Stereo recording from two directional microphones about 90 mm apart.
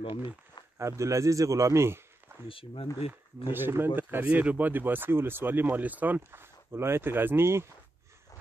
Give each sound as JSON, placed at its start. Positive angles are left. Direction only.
{"t": 0.0, "sound": "speech", "side_deg": 55}
{"t": 0.7, "sound": "a man's voice", "side_deg": -35}
{"t": 2.4, "sound": "speech", "side_deg": 85}
{"t": 3.5, "sound": "speech", "side_deg": -25}